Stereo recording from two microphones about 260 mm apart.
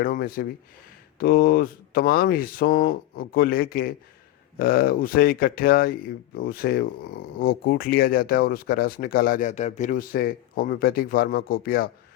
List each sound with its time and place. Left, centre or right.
0.0 s speech: left